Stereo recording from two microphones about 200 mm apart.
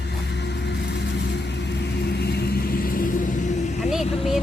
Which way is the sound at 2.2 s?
55° left (ahead or behind).